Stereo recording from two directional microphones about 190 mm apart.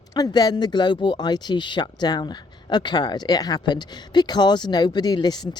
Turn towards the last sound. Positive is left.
turn(degrees=20)  # may be behind; listen again after turning